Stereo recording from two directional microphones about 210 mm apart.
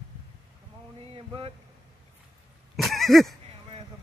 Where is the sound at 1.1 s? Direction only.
25° right (ahead or behind).